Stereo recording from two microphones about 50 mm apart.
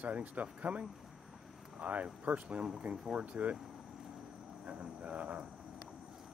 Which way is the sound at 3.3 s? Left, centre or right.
Right.